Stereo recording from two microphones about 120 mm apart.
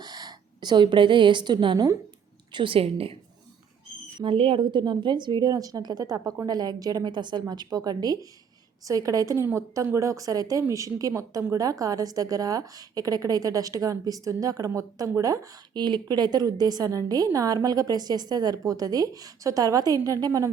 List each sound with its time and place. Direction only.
0.0 s a woman's voice: 35° right (ahead or behind); by 3.2 s 50° right (ahead or behind)
4.2 s a woman's voice: 50° right (ahead or behind); by 20.5 s 30° right (ahead or behind)